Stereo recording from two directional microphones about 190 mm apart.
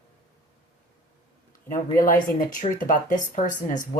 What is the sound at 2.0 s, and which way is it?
Speech, 45° left (ahead or behind).